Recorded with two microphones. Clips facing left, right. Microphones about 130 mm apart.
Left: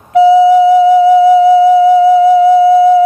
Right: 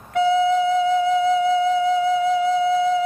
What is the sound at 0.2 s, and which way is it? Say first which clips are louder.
Flute: left 12 dB; 70° left (ahead or behind).